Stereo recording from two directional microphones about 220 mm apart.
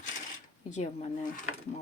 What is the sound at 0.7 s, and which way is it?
Speech, 35° left (ahead or behind).